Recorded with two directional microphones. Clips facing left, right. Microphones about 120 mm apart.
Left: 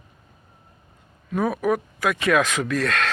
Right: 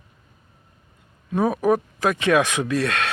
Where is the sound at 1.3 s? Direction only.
30° right (ahead or behind).